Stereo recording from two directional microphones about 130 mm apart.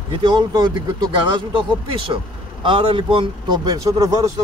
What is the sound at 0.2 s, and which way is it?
Speech, 35° right (ahead or behind).